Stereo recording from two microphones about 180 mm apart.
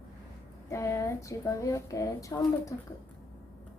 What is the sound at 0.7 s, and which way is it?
Speech, 15° left (ahead or behind).